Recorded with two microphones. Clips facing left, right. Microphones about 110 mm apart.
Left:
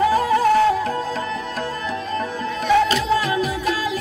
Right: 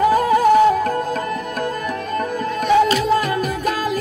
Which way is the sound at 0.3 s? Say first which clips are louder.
Right 5 dB; 15° right (ahead or behind).